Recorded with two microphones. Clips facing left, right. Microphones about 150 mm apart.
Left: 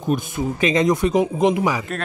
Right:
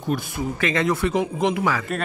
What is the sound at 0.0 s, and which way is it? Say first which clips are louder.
Speech: left 3 dB; 20° left (ahead or behind).